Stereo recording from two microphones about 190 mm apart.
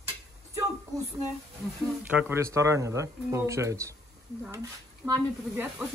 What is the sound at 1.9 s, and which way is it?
Speech, 5° right (ahead or behind).